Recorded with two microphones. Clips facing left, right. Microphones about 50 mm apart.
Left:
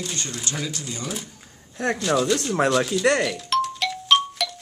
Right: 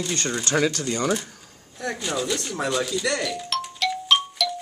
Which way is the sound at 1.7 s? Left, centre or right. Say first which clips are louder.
Left 5 dB; left.